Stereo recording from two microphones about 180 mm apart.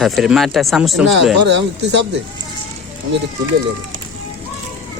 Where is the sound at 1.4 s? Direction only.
75° right (ahead or behind).